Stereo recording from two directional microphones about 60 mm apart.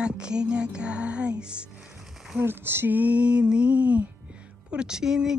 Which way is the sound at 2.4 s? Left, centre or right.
Right.